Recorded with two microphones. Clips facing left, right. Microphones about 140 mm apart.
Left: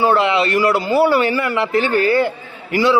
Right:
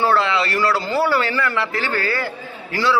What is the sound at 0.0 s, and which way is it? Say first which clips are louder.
A man's voice: left 3 dB; 20° left (ahead or behind).